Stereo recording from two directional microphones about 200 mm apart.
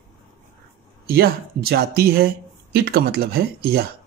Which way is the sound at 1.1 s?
50° right (ahead or behind).